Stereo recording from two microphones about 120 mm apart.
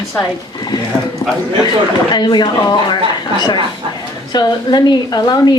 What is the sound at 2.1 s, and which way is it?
Speech, 40° left (ahead or behind).